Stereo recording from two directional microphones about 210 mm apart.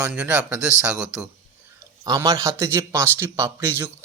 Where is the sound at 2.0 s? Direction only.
15° right (ahead or behind).